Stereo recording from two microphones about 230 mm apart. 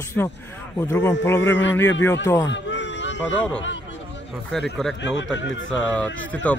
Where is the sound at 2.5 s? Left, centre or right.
Left.